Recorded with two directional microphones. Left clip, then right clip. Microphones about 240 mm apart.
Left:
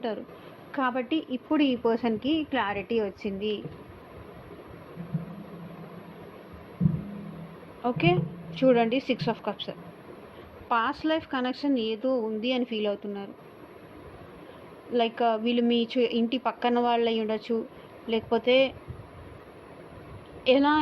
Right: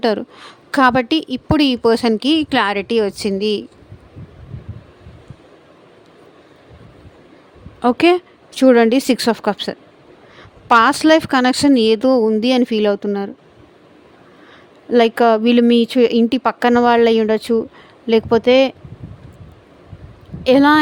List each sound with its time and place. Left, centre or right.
0.0 s speech: right
1.8 s a woman's voice: right
7.8 s speech: right
14.9 s speech: right
20.4 s speech: right